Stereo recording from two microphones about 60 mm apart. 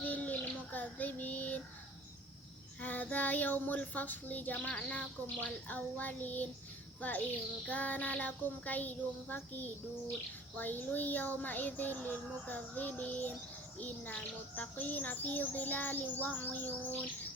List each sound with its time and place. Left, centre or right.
0.0 s child singing: left
2.8 s a child's voice: left
7.7 s a child's voice: left